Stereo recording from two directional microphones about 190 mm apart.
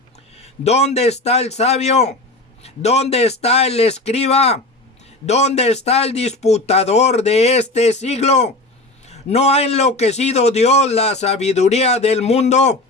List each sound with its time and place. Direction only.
0.3 s a man's voice: 35° left (ahead or behind)